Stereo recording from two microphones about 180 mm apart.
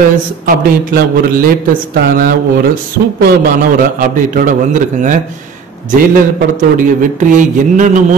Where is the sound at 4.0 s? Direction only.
50° right (ahead or behind).